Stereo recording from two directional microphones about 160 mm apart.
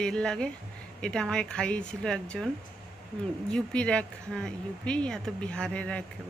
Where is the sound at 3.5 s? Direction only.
5° left (ahead or behind).